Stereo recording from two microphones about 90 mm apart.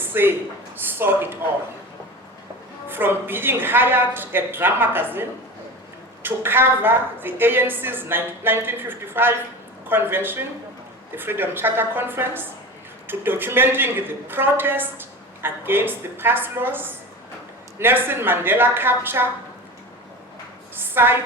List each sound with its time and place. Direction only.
0.0 s a man's voice: 25° right (ahead or behind)
2.9 s a woman's voice: 25° right (ahead or behind)
6.2 s a woman's voice: 25° right (ahead or behind)
20.7 s a woman's voice: 25° right (ahead or behind)